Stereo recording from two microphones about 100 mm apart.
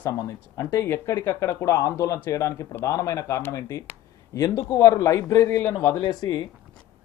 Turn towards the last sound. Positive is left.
turn(degrees=40)  # may be behind; listen again after turning